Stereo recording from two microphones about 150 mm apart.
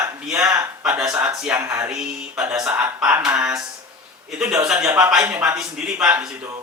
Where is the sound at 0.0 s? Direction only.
10° right (ahead or behind).